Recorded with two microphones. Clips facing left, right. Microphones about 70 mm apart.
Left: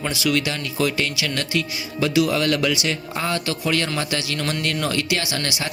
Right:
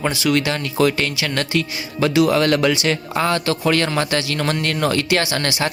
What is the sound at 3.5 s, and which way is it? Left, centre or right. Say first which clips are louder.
Speech: right 5 dB; right.